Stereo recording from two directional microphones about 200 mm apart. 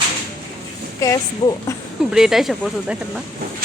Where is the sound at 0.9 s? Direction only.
15° left (ahead or behind).